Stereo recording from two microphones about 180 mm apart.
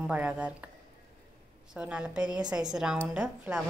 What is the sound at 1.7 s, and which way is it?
A woman's voice, 5° right (ahead or behind).